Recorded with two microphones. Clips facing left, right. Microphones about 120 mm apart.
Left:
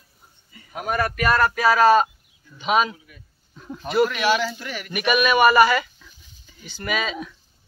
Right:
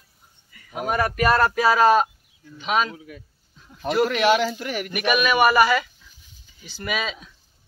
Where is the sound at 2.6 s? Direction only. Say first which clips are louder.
Left 3 dB; 5° left (ahead or behind).